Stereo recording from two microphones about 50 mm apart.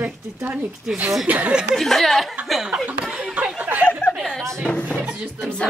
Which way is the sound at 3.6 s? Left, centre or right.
Right.